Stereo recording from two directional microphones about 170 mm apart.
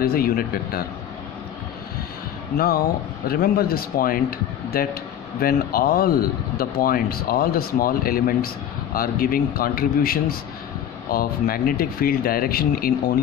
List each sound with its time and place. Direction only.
0.0 s speech: 60° left (ahead or behind)
2.5 s speech: 60° left (ahead or behind)